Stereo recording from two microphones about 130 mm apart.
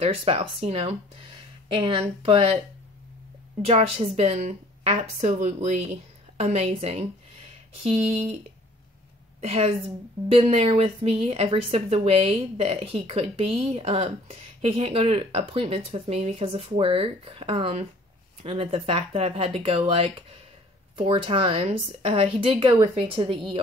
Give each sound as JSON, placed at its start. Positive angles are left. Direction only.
{"t": 0.0, "sound": "a woman's voice", "side_deg": -45}
{"t": 3.6, "sound": "a woman's voice", "side_deg": -50}
{"t": 9.4, "sound": "a woman's voice", "side_deg": -50}